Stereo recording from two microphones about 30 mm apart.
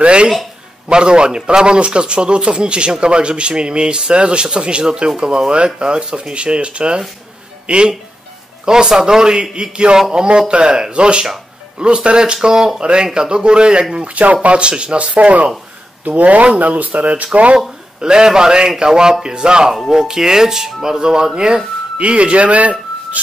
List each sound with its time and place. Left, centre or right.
0.0 s a man's voice: right
8.6 s a man's voice: right
14.0 s a man's voice: right
15.0 s speech: right
16.0 s speech: right
18.0 s speech: right
21.9 s speech: right